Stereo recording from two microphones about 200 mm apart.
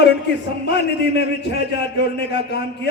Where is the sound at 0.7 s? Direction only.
60° left (ahead or behind).